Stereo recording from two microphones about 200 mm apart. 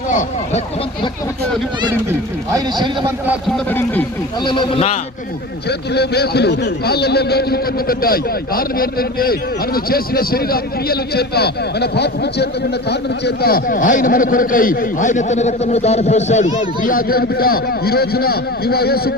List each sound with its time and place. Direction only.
0.1 s speech: 40° left (ahead or behind)
3.7 s speech: 10° left (ahead or behind)
4.4 s a man's voice: 25° left (ahead or behind)
5.6 s a man's voice: 55° left (ahead or behind)